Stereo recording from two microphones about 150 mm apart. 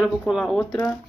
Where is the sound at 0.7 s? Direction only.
10° left (ahead or behind).